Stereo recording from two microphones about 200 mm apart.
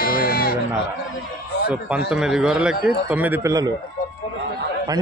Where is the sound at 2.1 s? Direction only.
5° right (ahead or behind).